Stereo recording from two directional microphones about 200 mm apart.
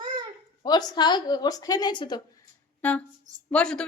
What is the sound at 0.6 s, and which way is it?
A woman's voice, 20° left (ahead or behind).